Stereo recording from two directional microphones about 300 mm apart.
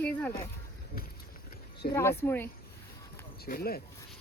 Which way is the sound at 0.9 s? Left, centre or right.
Left.